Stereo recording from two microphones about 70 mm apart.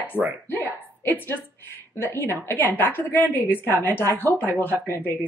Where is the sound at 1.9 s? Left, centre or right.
Left.